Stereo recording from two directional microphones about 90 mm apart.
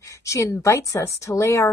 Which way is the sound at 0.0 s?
35° left (ahead or behind).